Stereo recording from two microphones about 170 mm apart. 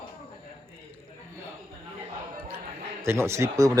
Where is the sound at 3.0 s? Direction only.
15° right (ahead or behind).